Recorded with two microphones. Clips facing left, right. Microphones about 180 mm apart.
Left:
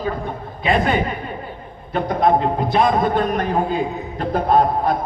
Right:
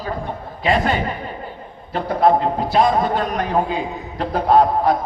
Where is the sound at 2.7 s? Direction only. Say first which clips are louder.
Even; 50° left (ahead or behind).